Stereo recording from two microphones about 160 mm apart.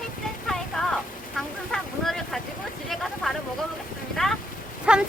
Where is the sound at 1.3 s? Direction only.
Centre (ahead or behind).